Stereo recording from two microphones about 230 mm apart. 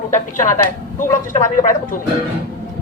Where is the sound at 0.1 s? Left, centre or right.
Left.